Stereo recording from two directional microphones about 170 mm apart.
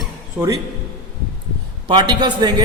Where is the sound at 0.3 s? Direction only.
20° right (ahead or behind).